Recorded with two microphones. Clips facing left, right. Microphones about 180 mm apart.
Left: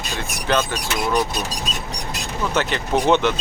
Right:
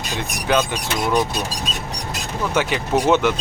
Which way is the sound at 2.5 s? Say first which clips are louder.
Right 1 dB; 10° right (ahead or behind).